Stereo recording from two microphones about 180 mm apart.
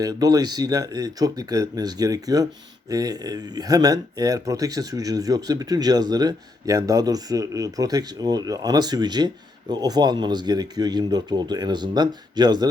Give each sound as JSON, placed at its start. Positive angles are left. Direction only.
{"t": 0.0, "sound": "speech", "side_deg": -20}